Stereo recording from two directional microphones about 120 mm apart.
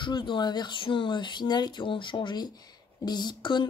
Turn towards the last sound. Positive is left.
turn(degrees=40)  # may be behind; listen again after turning